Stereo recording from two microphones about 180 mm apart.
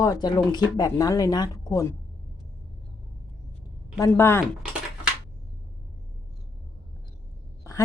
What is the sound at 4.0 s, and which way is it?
Speech, 15° left (ahead or behind).